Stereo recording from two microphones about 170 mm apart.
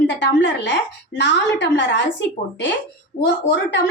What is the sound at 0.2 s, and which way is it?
A woman's voice, 90° left.